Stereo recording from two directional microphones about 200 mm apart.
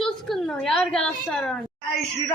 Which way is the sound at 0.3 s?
Centre (ahead or behind).